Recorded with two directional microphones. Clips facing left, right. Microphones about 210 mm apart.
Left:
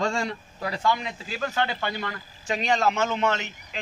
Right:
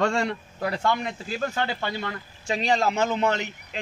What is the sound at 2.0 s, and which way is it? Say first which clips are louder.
A man's voice: right 1 dB; 30° right (ahead or behind).